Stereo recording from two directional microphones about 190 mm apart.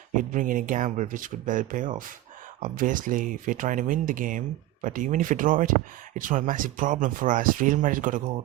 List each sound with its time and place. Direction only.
0.2 s speech: 45° right (ahead or behind)